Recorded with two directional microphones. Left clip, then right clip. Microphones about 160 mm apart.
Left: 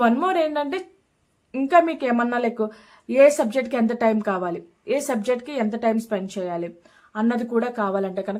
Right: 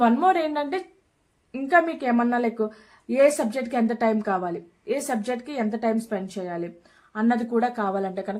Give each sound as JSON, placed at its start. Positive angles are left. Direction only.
{"t": 0.0, "sound": "a woman's voice", "side_deg": 25}